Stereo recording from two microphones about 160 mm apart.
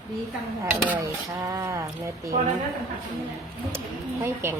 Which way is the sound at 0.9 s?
20° right (ahead or behind).